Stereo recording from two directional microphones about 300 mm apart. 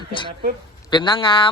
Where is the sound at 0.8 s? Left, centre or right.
Centre.